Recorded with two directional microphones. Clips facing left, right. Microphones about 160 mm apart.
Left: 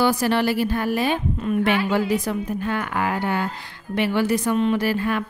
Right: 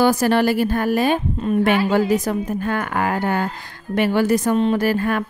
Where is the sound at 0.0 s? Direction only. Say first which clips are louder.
Right 4 dB; 45° right (ahead or behind).